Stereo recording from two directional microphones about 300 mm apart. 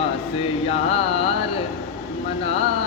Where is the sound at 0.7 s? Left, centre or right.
Centre.